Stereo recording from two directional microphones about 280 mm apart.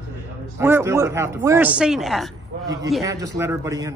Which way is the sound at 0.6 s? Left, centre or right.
Centre.